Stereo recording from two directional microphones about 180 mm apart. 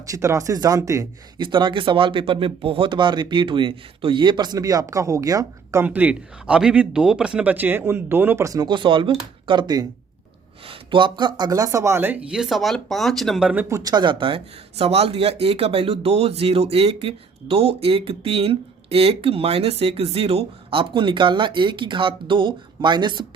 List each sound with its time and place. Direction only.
0.0 s speech: 15° right (ahead or behind)